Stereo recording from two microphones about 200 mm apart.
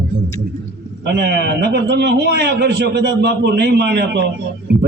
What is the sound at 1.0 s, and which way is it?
A man's voice, 55° right (ahead or behind).